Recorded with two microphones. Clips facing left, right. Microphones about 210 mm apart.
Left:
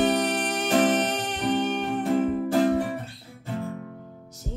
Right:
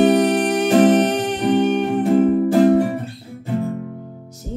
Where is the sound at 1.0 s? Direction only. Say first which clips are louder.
Right 8 dB; 15° right (ahead or behind).